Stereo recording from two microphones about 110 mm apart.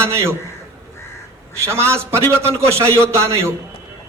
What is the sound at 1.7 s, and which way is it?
A man's voice, 25° right (ahead or behind).